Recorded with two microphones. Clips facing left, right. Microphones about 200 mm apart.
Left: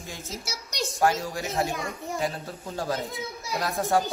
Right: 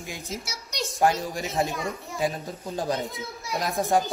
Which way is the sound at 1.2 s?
15° right (ahead or behind).